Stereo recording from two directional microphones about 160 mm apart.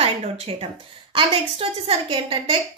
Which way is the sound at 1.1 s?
35° right (ahead or behind).